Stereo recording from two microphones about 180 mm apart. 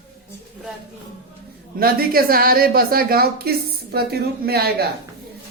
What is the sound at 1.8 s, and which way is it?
Speech, 55° right (ahead or behind).